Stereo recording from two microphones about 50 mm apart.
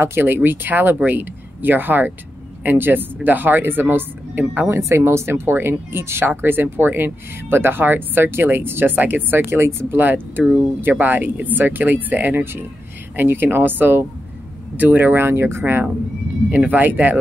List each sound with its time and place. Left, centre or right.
0.0 s speech: right
4.6 s speech: right
9.5 s speech: right
10.0 s speech: right
15.0 s speech: right
16.5 s speech: right